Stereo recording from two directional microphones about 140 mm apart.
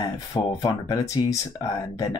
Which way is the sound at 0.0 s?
25° left (ahead or behind).